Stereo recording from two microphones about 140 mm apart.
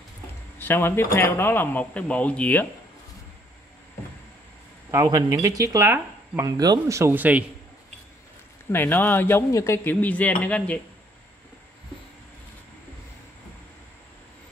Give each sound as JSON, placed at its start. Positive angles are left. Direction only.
{"t": 0.6, "sound": "speech", "side_deg": 15}
{"t": 4.9, "sound": "speech", "side_deg": -25}
{"t": 8.7, "sound": "speech", "side_deg": 15}